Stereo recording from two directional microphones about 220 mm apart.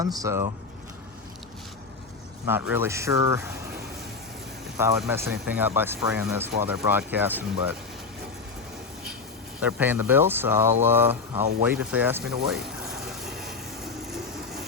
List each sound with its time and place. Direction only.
0.0 s speech: 15° right (ahead or behind)
2.5 s speech: 10° right (ahead or behind)
4.8 s speech: 10° right (ahead or behind)
9.6 s speech: 5° right (ahead or behind)
12.5 s a sound: centre (ahead or behind)